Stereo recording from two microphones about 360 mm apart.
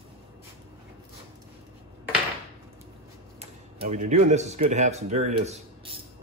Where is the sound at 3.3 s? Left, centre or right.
Centre.